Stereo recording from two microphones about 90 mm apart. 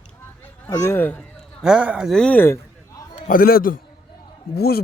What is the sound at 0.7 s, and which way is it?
Speech, 30° left (ahead or behind).